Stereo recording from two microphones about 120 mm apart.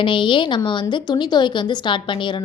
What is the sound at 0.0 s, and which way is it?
A woman's voice, 45° left (ahead or behind).